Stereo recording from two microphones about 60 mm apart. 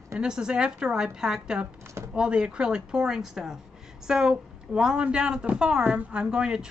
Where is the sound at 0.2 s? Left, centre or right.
Centre.